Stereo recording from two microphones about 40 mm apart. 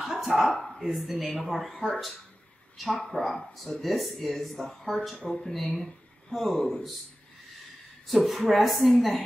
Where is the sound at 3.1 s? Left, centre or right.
Centre.